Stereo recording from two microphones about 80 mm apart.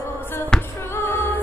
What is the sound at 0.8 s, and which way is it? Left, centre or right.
Music, left.